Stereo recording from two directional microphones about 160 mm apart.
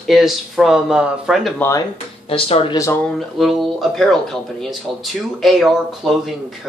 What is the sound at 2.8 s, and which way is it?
Speech, 15° left (ahead or behind).